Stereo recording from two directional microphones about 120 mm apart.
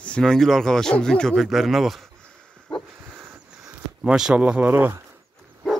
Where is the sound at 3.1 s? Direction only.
20° right (ahead or behind).